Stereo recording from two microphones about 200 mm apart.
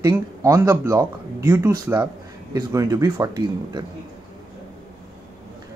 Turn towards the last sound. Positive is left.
turn(degrees=-15)  # may be behind; listen again after turning